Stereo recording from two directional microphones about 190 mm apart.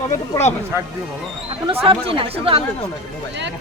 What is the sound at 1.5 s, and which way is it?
A man's voice, 30° right (ahead or behind).